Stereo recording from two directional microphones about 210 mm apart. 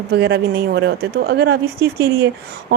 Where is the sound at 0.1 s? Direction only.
55° right (ahead or behind).